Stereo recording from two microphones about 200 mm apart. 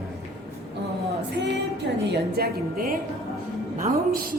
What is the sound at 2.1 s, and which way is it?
Speech, 50° right (ahead or behind).